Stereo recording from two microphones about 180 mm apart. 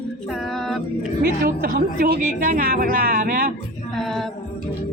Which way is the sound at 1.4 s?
55° right (ahead or behind).